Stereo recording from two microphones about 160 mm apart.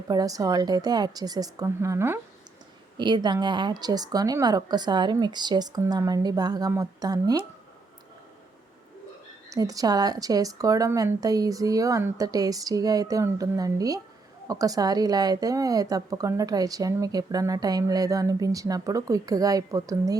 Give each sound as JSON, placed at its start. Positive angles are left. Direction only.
{"t": 0.1, "sound": "a woman's voice", "side_deg": -25}
{"t": 3.0, "sound": "a woman's voice", "side_deg": -30}
{"t": 9.5, "sound": "a woman's voice", "side_deg": -20}